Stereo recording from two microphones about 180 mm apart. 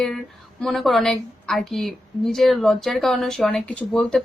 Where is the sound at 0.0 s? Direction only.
Centre (ahead or behind).